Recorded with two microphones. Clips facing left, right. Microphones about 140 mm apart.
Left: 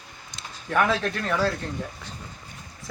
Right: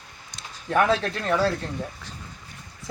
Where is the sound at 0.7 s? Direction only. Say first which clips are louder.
Right 2 dB; 25° right (ahead or behind).